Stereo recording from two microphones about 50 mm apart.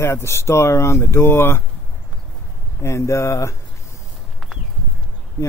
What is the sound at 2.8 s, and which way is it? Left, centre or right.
Speech, left.